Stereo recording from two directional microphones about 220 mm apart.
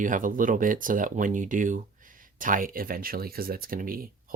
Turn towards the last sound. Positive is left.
turn(degrees=-40)  # may be behind; listen again after turning